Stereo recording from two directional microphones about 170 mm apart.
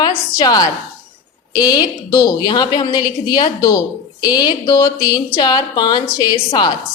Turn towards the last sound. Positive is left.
turn(degrees=25)  # may be behind; listen again after turning